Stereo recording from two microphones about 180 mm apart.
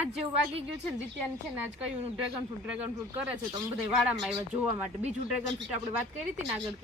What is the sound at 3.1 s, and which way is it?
Speech, 15° right (ahead or behind).